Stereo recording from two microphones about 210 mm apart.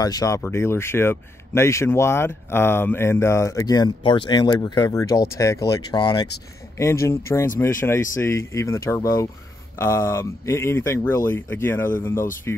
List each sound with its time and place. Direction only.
0.0 s speech: 15° left (ahead or behind)